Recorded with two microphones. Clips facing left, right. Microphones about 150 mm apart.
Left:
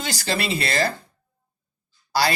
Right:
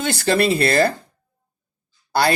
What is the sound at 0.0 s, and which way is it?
Speech, 55° right (ahead or behind).